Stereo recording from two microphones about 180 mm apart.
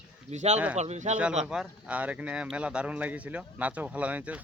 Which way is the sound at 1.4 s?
5° right (ahead or behind).